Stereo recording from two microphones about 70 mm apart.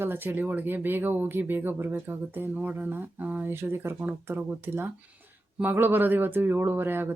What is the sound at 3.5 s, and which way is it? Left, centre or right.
Speech, right.